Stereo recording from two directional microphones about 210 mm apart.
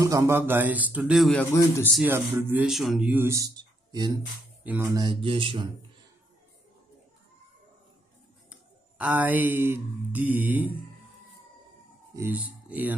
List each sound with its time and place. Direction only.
0.0 s speech: 15° right (ahead or behind); by 2.0 s 10° left (ahead or behind)
2.0 s speech: 10° right (ahead or behind)
8.5 s speech: 5° right (ahead or behind)
12.2 s speech: 5° right (ahead or behind)